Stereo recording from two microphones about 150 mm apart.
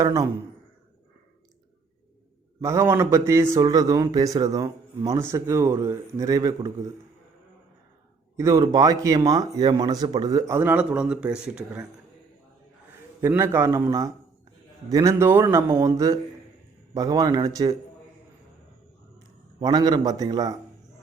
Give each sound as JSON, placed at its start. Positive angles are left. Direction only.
{"t": 0.0, "sound": "speech", "side_deg": -20}
{"t": 2.6, "sound": "speech", "side_deg": -20}
{"t": 8.4, "sound": "speech", "side_deg": -20}
{"t": 13.2, "sound": "a man's voice", "side_deg": -15}
{"t": 19.5, "sound": "speech", "side_deg": -25}